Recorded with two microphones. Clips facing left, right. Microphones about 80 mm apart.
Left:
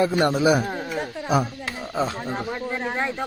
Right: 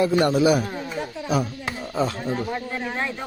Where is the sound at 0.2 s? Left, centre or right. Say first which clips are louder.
Right 1 dB; left.